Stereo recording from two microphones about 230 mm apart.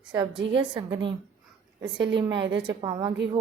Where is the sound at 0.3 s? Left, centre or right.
Right.